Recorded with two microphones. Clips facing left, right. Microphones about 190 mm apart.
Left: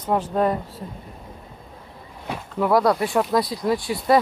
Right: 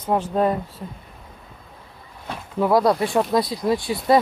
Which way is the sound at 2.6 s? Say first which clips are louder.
Right 1 dB; 20° right (ahead or behind).